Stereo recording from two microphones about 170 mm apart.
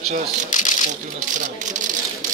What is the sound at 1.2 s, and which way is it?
Speech, 50° right (ahead or behind).